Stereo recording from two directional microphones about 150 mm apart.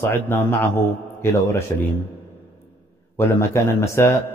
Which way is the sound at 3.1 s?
15° left (ahead or behind).